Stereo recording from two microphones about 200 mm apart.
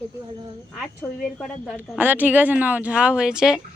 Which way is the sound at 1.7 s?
10° right (ahead or behind).